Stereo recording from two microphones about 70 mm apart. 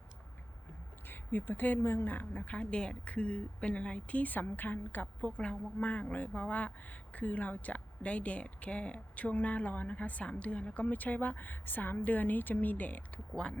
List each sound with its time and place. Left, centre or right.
1.0 s a woman's voice: left